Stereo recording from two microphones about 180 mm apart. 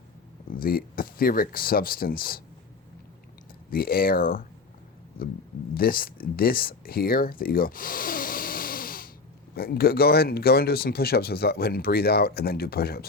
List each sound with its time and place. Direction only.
0.5 s speech: 55° left (ahead or behind)
3.7 s speech: 55° left (ahead or behind)
5.7 s speech: 55° left (ahead or behind)